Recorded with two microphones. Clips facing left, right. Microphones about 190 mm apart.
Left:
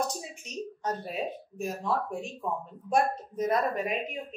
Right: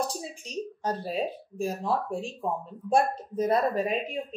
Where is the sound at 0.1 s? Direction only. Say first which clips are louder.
Right 3 dB; 30° right (ahead or behind).